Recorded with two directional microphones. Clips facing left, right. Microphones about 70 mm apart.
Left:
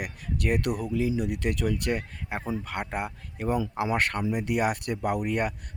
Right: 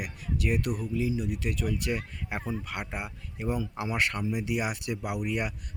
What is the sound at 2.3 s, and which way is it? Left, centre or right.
Speech, left.